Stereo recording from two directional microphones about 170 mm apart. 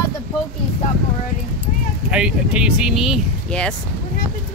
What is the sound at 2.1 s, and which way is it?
Speech, 5° right (ahead or behind).